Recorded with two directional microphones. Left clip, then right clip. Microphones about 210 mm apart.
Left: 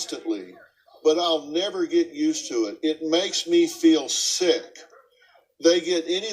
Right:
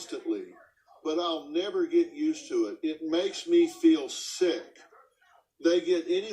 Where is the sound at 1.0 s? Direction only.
45° left (ahead or behind).